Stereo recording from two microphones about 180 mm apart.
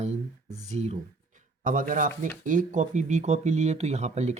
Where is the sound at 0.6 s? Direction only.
40° right (ahead or behind).